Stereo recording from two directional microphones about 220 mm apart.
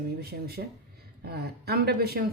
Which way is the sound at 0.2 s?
45° right (ahead or behind).